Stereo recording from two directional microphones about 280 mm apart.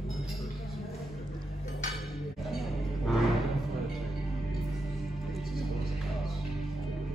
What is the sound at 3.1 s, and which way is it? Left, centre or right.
Music, centre.